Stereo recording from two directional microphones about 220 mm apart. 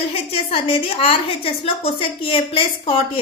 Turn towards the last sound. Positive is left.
turn(degrees=25)  # may be behind; listen again after turning